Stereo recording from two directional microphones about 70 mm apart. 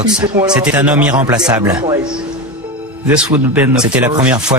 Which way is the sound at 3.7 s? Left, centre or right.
Centre.